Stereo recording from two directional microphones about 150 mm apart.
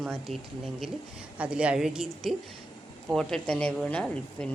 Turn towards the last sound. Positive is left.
turn(degrees=5)  # may be behind; listen again after turning